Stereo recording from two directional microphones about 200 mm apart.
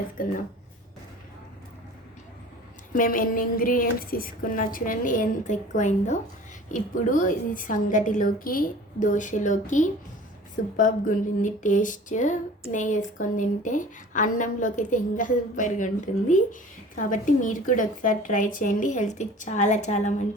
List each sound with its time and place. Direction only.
0.2 s a woman's voice: 45° left (ahead or behind)
2.9 s a woman's voice: 40° left (ahead or behind)